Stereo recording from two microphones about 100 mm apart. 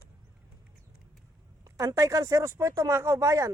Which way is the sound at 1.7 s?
30° right (ahead or behind).